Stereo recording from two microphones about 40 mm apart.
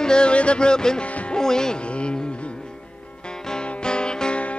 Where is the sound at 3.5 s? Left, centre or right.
Left.